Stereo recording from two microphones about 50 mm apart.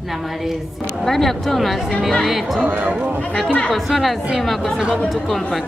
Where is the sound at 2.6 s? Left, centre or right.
Right.